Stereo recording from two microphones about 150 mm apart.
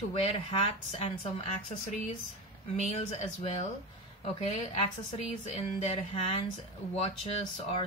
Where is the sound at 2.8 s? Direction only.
50° left (ahead or behind).